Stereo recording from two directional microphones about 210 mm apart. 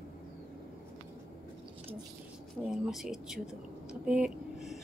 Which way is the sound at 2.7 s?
Centre (ahead or behind).